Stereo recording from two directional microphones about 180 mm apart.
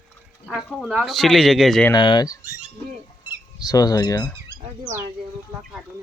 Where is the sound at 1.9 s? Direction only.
25° left (ahead or behind).